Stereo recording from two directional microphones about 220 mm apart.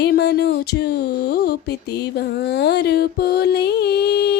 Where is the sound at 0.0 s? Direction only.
50° left (ahead or behind).